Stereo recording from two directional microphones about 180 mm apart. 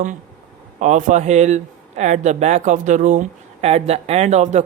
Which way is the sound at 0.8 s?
45° right (ahead or behind).